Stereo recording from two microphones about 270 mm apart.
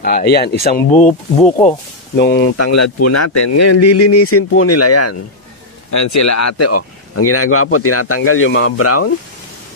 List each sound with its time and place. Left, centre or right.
0.0 s speech: left
2.1 s speech: left
2.5 s speech: left
5.9 s speech: left